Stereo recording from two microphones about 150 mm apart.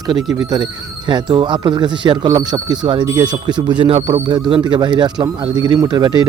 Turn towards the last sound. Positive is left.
turn(degrees=-25)  # may be behind; listen again after turning